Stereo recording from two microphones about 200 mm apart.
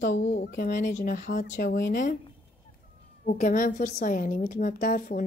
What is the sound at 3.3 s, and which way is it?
A woman's voice, 40° left (ahead or behind).